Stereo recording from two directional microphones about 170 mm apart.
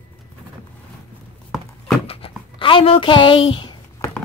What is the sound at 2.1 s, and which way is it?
Writing, 30° left (ahead or behind).